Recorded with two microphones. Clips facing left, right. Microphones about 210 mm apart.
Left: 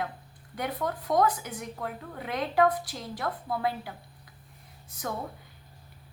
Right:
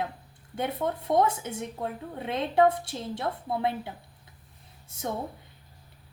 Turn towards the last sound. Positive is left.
turn(degrees=-25)  # may be behind; listen again after turning